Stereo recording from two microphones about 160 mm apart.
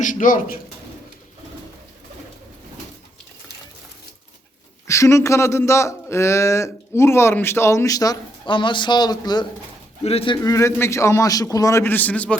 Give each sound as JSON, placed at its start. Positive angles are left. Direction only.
{"t": 0.0, "sound": "speech", "side_deg": 55}
{"t": 4.9, "sound": "speech", "side_deg": 20}
{"t": 10.0, "sound": "speech", "side_deg": 40}
{"t": 10.4, "sound": "speech", "side_deg": 20}